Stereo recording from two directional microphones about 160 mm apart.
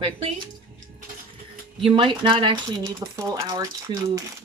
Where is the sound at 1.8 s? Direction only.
30° right (ahead or behind).